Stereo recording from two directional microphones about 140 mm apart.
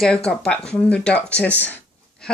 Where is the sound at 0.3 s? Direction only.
5° left (ahead or behind).